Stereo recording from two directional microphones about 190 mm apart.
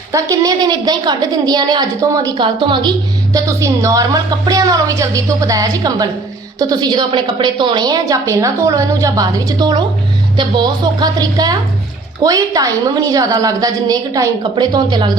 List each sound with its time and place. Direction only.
0.1 s a woman's voice: 20° right (ahead or behind)